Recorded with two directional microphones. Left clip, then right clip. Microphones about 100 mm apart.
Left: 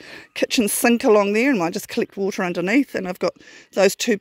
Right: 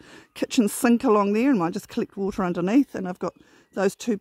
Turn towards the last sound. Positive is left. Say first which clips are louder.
# left 7 dB
turn(degrees=-25)  # may be behind; listen again after turning